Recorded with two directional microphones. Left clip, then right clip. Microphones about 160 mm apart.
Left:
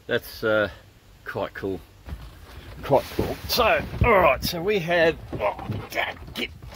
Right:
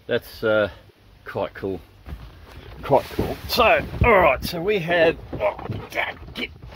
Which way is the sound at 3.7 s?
25° right (ahead or behind).